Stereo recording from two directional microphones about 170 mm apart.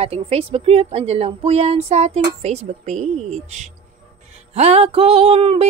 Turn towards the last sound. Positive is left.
turn(degrees=-35)  # may be behind; listen again after turning